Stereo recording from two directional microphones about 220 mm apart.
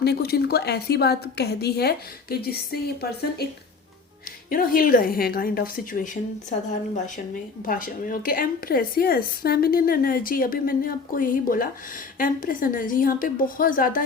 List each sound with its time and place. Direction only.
0.0 s a woman's voice: 45° left (ahead or behind)
4.4 s a woman's voice: 40° left (ahead or behind)
7.6 s a woman's voice: 40° left (ahead or behind)